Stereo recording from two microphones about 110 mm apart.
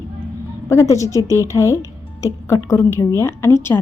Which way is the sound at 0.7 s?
30° left (ahead or behind).